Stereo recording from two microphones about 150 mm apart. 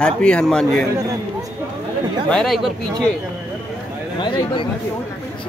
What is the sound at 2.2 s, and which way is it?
Speech, 5° left (ahead or behind).